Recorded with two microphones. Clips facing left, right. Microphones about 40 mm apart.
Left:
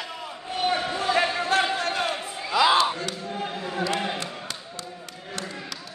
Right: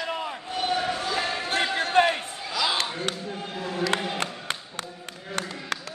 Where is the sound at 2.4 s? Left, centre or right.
Centre.